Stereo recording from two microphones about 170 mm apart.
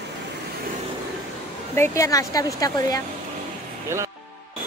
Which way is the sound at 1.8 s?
20° left (ahead or behind).